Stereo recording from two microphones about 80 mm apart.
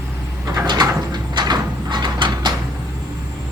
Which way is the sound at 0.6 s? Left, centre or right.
Right.